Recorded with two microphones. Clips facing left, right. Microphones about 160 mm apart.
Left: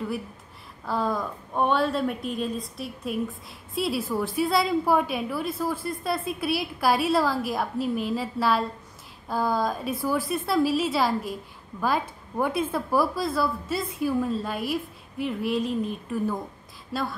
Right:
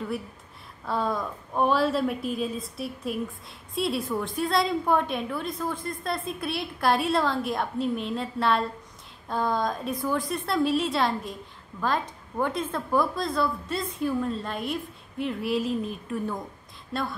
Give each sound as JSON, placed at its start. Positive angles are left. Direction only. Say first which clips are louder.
{"t": 0.8, "sound": "a woman's voice", "louder": "left 1 dB", "side_deg": 0}